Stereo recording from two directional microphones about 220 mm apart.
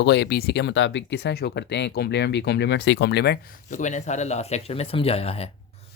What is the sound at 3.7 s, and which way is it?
Speech, 35° left (ahead or behind).